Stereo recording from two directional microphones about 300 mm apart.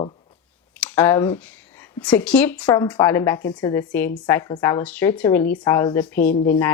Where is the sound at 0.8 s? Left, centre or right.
Centre.